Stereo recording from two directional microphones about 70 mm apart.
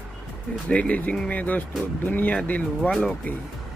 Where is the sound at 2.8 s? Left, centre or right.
Centre.